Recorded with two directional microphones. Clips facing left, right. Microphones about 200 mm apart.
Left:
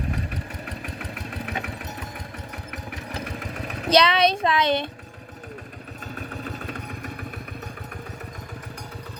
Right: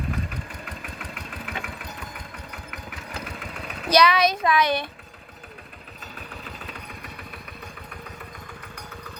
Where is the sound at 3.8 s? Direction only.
25° left (ahead or behind).